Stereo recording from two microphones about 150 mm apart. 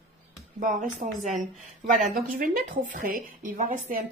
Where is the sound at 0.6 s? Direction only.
60° right (ahead or behind).